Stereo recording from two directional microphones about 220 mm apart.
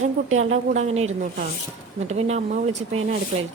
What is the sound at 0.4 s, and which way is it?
A woman's voice, 30° right (ahead or behind).